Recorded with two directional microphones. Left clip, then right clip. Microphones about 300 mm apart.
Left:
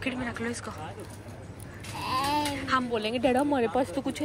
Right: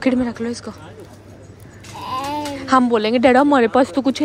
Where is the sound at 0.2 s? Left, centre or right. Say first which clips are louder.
Right 9 dB; centre.